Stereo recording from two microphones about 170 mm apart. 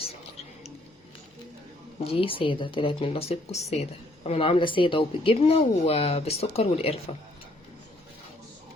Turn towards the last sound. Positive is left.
turn(degrees=35)  # may be behind; listen again after turning